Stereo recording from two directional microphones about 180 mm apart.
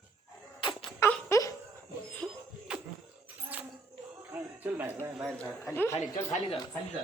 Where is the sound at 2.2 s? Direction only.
Centre (ahead or behind).